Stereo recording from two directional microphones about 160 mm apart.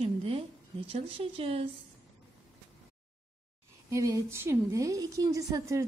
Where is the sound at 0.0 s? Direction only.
40° right (ahead or behind).